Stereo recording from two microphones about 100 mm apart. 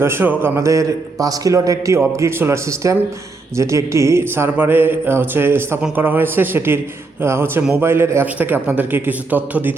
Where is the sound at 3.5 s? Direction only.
30° right (ahead or behind).